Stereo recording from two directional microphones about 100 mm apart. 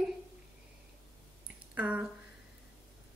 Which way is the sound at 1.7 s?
15° right (ahead or behind).